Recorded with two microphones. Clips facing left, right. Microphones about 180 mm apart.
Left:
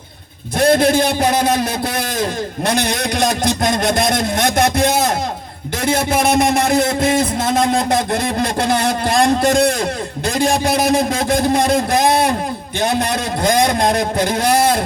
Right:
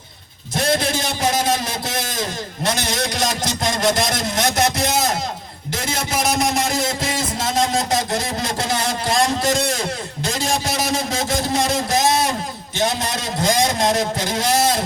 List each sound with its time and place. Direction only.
0.5 s speech: 55° left (ahead or behind)
2.6 s speech: 55° left (ahead or behind)